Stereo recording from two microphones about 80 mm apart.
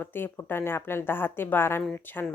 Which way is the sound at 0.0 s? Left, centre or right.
Left.